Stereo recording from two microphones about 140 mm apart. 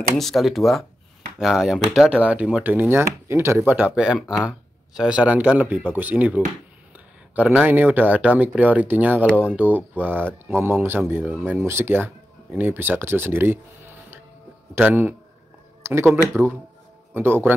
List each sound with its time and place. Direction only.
0.2 s speech: centre (ahead or behind)
15.8 s a sound: 20° right (ahead or behind)
16.3 s speech: 15° right (ahead or behind)